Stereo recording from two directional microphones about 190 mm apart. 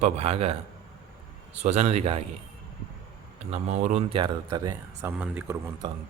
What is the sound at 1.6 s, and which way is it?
Speech, 35° right (ahead or behind).